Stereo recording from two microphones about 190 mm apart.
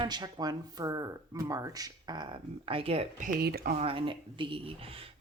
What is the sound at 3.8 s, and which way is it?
Speech, 30° right (ahead or behind).